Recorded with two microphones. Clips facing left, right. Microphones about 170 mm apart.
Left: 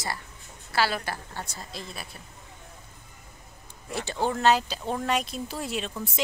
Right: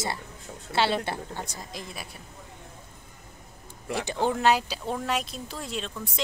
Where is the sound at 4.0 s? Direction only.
15° right (ahead or behind).